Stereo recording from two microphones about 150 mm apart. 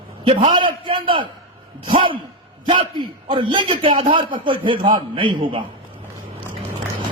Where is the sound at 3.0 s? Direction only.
30° right (ahead or behind).